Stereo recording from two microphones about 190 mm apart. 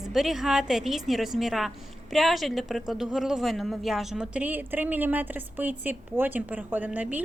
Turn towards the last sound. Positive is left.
turn(degrees=-10)  # may be behind; listen again after turning